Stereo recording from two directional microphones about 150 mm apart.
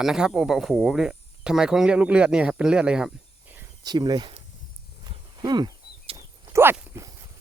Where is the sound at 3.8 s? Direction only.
25° right (ahead or behind).